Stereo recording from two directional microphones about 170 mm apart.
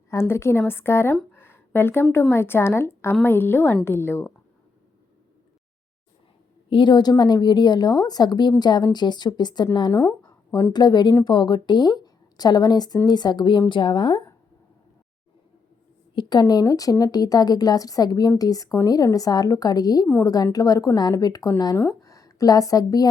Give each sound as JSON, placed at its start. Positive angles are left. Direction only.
{"t": 0.1, "sound": "a woman's voice", "side_deg": 15}
{"t": 1.3, "sound": "a sound", "side_deg": 15}
{"t": 2.3, "sound": "a woman's voice", "side_deg": 15}
{"t": 6.7, "sound": "speech", "side_deg": 25}
{"t": 16.1, "sound": "a woman's voice", "side_deg": 25}